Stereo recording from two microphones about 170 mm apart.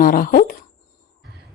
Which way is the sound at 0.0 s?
55° left (ahead or behind).